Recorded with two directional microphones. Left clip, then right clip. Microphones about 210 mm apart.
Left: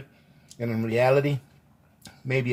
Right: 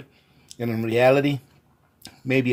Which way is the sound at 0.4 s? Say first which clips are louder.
Right 3 dB; 35° right (ahead or behind).